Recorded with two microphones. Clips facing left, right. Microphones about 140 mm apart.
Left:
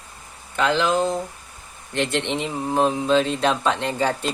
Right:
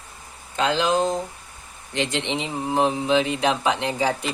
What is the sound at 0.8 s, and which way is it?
Speech, 15° right (ahead or behind).